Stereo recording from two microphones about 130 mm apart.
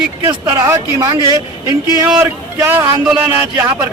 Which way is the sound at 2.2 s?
15° right (ahead or behind).